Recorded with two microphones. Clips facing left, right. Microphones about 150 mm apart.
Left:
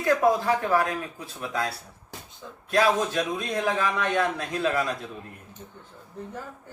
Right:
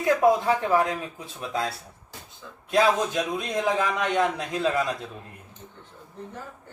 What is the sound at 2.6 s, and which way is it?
A man's voice, 20° right (ahead or behind).